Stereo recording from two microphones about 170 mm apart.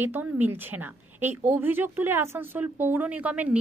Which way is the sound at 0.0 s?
10° right (ahead or behind).